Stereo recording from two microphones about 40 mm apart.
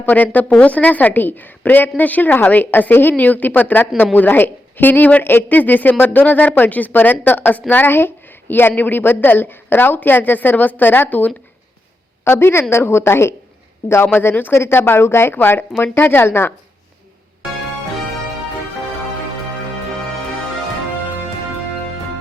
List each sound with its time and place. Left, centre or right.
0.0 s a woman's voice: left
12.2 s a woman's voice: left